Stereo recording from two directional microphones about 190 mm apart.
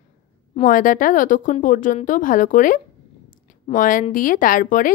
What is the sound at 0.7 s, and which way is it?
Speech, 45° left (ahead or behind).